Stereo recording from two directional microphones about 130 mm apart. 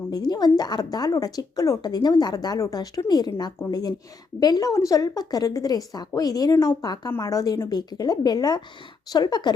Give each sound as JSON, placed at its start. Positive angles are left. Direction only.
{"t": 0.1, "sound": "a woman's voice", "side_deg": 30}